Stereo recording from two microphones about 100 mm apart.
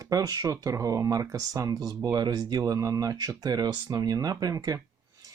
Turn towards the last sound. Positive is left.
turn(degrees=-40)  # may be behind; listen again after turning